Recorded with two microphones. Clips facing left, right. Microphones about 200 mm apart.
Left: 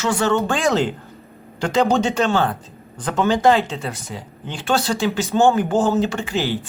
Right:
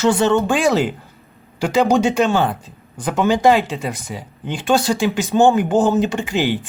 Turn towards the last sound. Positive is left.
turn(degrees=-15)  # may be behind; listen again after turning